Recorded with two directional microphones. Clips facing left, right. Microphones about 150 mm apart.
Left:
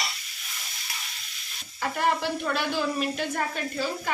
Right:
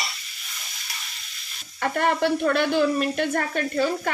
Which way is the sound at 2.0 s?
60° right (ahead or behind).